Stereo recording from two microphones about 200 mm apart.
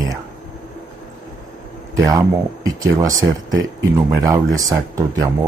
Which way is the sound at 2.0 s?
15° right (ahead or behind).